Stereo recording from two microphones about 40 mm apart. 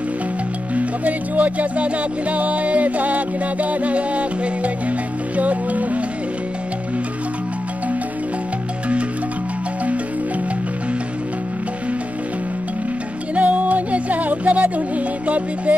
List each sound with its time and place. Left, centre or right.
0.7 s music: right
13.3 s music: right